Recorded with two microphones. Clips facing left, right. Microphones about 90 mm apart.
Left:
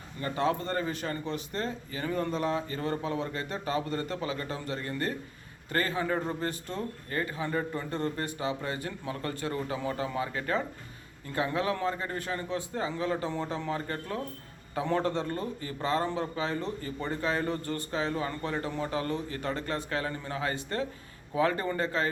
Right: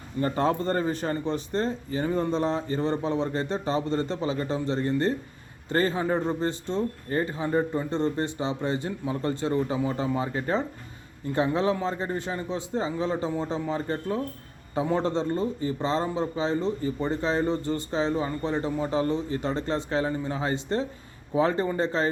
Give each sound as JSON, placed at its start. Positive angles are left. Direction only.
{"t": 0.2, "sound": "a man's voice", "side_deg": -35}